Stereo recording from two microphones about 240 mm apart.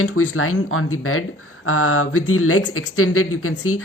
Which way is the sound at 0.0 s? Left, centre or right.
Left.